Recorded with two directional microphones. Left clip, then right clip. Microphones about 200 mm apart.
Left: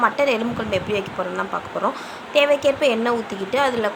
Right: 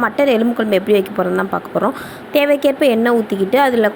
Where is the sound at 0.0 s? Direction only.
20° right (ahead or behind).